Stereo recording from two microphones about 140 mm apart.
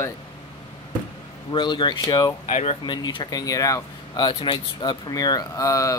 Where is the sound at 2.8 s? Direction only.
35° left (ahead or behind).